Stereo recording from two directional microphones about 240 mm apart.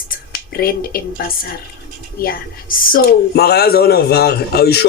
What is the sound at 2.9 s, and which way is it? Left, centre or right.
A man's voice, left.